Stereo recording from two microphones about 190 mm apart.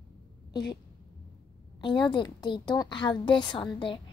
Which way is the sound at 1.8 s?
25° left (ahead or behind).